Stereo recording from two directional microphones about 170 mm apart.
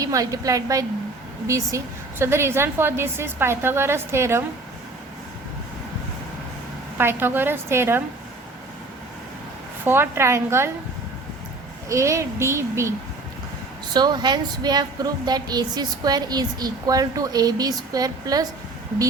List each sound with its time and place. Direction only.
0.0 s a woman's voice: 20° right (ahead or behind)
7.0 s a woman's voice: 15° right (ahead or behind)
9.8 s a woman's voice: 15° right (ahead or behind)
11.9 s a woman's voice: 15° right (ahead or behind)
13.9 s a woman's voice: 25° right (ahead or behind)